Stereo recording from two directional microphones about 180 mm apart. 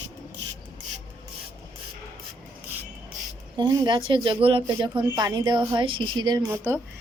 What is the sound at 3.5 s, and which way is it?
A woman's voice, 20° right (ahead or behind).